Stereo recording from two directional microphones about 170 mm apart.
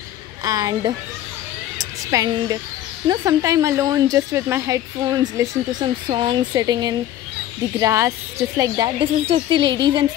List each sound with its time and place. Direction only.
0.4 s a woman's voice: 20° right (ahead or behind)